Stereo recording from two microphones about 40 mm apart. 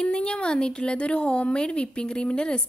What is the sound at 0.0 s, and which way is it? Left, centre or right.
Speech, left.